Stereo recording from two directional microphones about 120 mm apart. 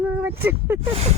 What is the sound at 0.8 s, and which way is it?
Speech, 60° right (ahead or behind).